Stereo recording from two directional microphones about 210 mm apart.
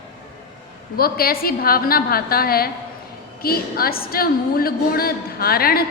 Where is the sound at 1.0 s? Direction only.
45° left (ahead or behind).